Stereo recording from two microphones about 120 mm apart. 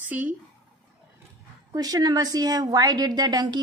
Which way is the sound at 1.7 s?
30° right (ahead or behind).